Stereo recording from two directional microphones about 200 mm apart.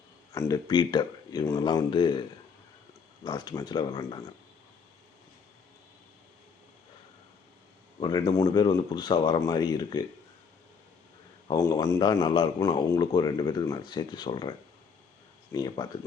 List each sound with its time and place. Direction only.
0.3 s a man's voice: 15° left (ahead or behind)
3.2 s a man's voice: 20° left (ahead or behind)
7.9 s a man's voice: 20° left (ahead or behind)
11.4 s a man's voice: 15° left (ahead or behind)
15.5 s a man's voice: 20° left (ahead or behind)